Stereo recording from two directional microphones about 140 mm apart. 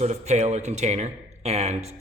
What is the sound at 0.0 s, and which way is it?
Speech, 50° right (ahead or behind).